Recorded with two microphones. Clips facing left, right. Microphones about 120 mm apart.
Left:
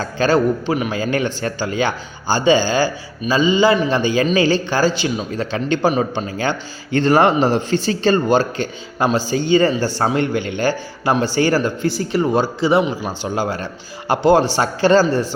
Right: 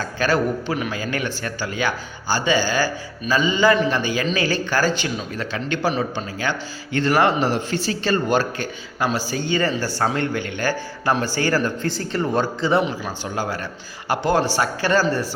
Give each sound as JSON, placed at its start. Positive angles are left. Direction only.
{"t": 0.0, "sound": "a man's voice", "side_deg": 25}